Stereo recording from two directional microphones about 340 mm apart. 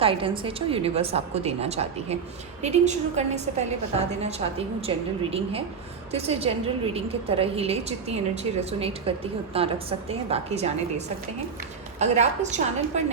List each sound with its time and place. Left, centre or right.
0.0 s a woman's voice: centre